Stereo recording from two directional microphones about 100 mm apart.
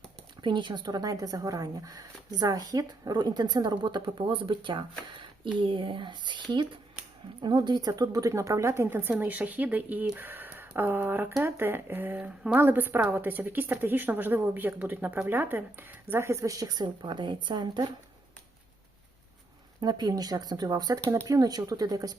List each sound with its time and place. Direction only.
0.4 s a woman's voice: 50° right (ahead or behind)
19.8 s speech: 45° right (ahead or behind)